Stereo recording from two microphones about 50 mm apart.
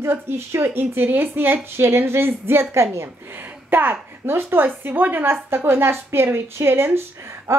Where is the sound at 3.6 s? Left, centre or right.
Right.